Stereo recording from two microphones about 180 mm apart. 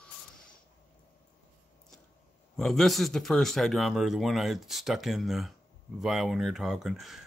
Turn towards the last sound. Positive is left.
turn(degrees=0)  # may be behind; listen again after turning